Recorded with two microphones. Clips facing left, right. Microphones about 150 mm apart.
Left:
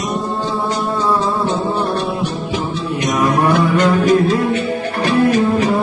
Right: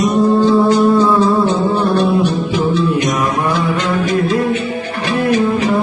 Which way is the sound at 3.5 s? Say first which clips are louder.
Left 3 dB; 50° left (ahead or behind).